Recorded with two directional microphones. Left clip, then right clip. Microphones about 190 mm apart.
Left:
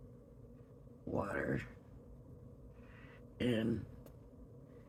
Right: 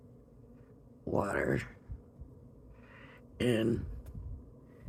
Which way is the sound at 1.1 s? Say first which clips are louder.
Right 7 dB; 55° right (ahead or behind).